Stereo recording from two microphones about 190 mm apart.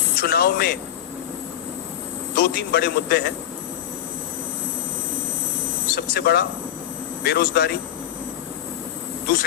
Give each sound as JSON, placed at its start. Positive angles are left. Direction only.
{"t": 0.2, "sound": "a man's voice", "side_deg": 55}
{"t": 2.3, "sound": "a man's voice", "side_deg": 55}
{"t": 5.9, "sound": "a man's voice", "side_deg": 55}